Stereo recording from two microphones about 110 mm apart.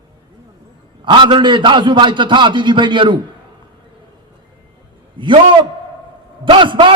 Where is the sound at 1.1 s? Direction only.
50° right (ahead or behind).